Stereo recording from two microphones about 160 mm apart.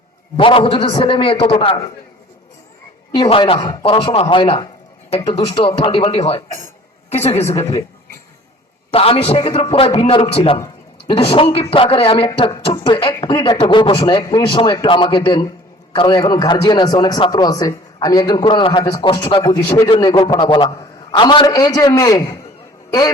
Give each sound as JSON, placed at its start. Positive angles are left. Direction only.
{"t": 0.3, "sound": "a man's voice", "side_deg": 35}
{"t": 3.2, "sound": "a man's voice", "side_deg": 35}
{"t": 8.9, "sound": "a man's voice", "side_deg": 35}